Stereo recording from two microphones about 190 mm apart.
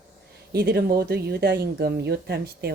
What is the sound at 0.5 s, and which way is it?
Speech, 55° right (ahead or behind).